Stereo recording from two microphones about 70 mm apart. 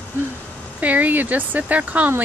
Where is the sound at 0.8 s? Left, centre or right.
Right.